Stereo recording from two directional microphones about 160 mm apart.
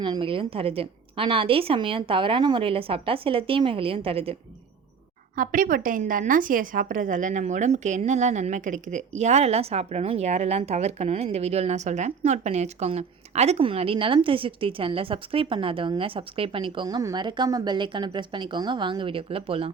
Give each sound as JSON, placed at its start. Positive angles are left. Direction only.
{"t": 0.0, "sound": "a woman's voice", "side_deg": -30}
{"t": 5.4, "sound": "a woman's voice", "side_deg": -60}